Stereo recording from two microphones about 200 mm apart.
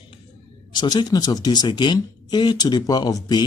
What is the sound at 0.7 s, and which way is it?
Speech, 20° left (ahead or behind).